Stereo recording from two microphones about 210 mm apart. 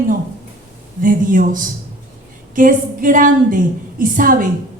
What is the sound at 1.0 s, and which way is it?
A woman's voice, 40° right (ahead or behind).